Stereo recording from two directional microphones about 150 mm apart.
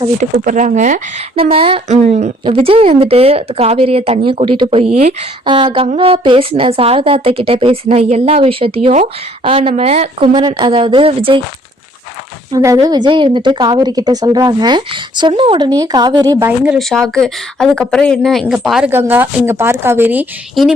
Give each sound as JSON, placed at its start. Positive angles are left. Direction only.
{"t": 0.2, "sound": "speech", "side_deg": -60}
{"t": 1.5, "sound": "a woman's voice", "side_deg": -40}
{"t": 2.4, "sound": "a woman's voice", "side_deg": -40}
{"t": 12.5, "sound": "a woman's voice", "side_deg": -25}
{"t": 16.5, "sound": "speech", "side_deg": 0}
{"t": 18.9, "sound": "speech", "side_deg": -15}